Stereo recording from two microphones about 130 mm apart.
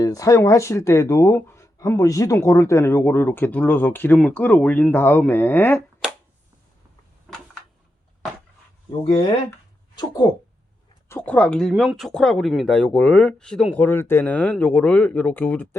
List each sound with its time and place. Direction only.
0.0 s speech: 25° left (ahead or behind)
9.9 s speech: 30° left (ahead or behind)
11.1 s speech: 15° left (ahead or behind)
11.7 s speech: 5° right (ahead or behind)
13.7 s speech: 15° left (ahead or behind)